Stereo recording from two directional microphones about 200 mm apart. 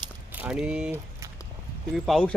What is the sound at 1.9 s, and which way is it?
Speech, centre (ahead or behind).